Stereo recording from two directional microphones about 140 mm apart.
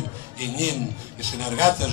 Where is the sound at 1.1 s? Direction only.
20° right (ahead or behind).